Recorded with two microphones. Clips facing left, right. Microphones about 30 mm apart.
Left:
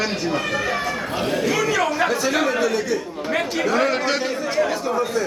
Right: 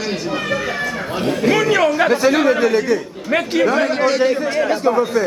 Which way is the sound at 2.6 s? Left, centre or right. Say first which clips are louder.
Right 5 dB; right.